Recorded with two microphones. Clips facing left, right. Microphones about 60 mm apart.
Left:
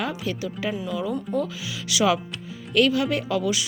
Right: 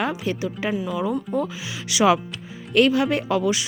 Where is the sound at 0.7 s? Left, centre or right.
Centre.